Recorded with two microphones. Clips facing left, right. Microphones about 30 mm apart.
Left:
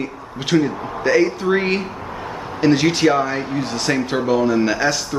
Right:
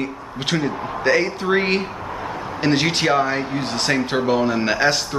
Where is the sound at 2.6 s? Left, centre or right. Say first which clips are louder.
Left 4 dB; centre.